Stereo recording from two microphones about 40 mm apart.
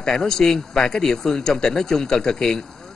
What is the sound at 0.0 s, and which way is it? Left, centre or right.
A woman's voice, centre.